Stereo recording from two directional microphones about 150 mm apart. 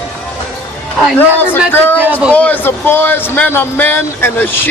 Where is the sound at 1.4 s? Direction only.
15° left (ahead or behind).